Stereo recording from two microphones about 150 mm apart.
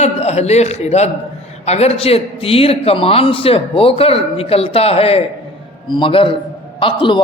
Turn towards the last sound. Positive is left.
turn(degrees=35)  # may be behind; listen again after turning